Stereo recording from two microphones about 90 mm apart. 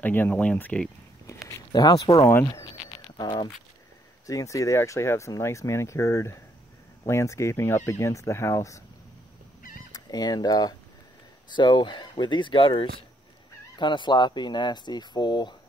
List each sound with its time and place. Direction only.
0.0 s speech: 20° left (ahead or behind)
1.5 s speech: 45° left (ahead or behind)
4.3 s speech: 40° left (ahead or behind)
8.1 s speech: 35° left (ahead or behind)
9.9 s speech: 45° left (ahead or behind)
11.5 s speech: 60° left (ahead or behind)
13.7 s speech: 60° left (ahead or behind)